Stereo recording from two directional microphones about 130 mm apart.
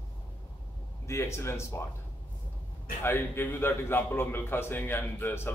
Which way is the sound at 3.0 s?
15° left (ahead or behind).